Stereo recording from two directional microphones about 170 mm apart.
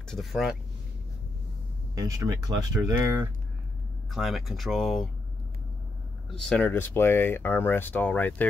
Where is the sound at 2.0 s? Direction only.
20° right (ahead or behind).